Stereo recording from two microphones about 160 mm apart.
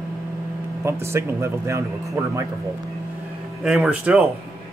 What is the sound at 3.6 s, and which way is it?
Speech, 5° right (ahead or behind).